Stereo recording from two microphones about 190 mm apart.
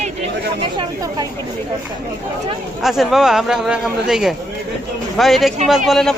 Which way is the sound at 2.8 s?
Centre (ahead or behind).